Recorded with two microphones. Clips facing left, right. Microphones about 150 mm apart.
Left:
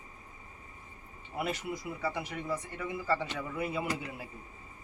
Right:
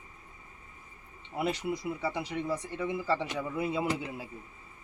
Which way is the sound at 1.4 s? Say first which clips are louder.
Right 4 dB; 20° right (ahead or behind).